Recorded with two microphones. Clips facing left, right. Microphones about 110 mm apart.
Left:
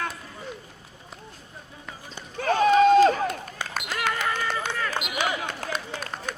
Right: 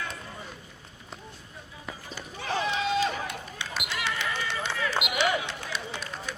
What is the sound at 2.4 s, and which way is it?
Run, 50° left (ahead or behind).